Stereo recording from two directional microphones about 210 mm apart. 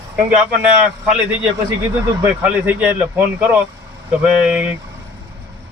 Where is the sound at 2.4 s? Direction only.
5° right (ahead or behind).